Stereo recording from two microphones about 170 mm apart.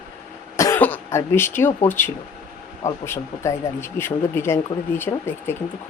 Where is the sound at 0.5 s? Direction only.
15° left (ahead or behind).